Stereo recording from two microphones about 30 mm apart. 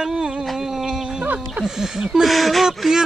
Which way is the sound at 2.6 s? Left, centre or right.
Centre.